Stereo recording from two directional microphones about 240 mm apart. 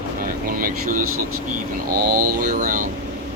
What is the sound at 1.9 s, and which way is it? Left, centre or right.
Mantra, right.